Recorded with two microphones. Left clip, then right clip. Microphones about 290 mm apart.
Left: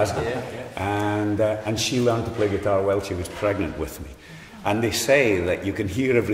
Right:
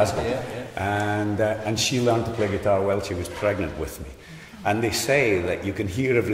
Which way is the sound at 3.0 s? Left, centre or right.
Centre.